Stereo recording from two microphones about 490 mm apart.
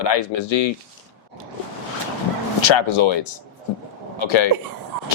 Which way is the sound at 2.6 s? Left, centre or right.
Left.